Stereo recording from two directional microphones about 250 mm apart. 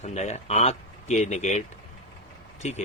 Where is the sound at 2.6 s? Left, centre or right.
Left.